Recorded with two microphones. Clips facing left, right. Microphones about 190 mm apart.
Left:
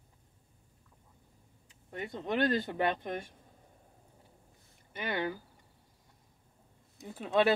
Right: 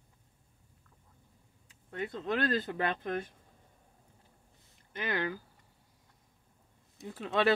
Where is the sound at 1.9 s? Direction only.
15° left (ahead or behind).